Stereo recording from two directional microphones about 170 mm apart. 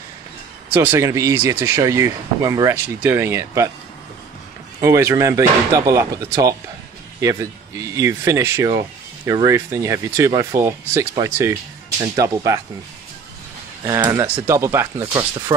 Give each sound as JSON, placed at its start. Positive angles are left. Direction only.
{"t": 0.7, "sound": "speech", "side_deg": -15}
{"t": 4.7, "sound": "speech", "side_deg": -15}
{"t": 13.8, "sound": "speech", "side_deg": -20}